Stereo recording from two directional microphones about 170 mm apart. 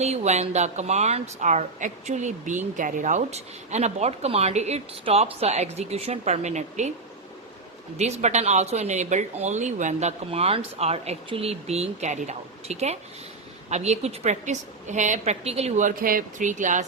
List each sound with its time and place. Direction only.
0.0 s a woman's voice: 40° right (ahead or behind)
7.9 s a woman's voice: 40° right (ahead or behind)